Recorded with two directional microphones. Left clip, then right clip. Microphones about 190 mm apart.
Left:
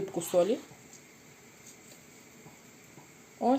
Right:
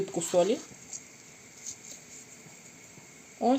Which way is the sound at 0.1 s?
10° right (ahead or behind).